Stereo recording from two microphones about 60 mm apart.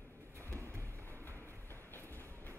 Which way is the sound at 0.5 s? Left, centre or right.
Right.